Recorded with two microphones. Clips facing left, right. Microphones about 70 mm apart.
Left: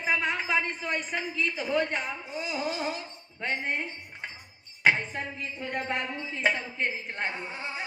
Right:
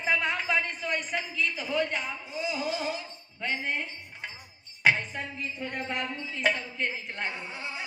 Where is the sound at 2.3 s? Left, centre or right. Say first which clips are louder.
Right 1 dB; left.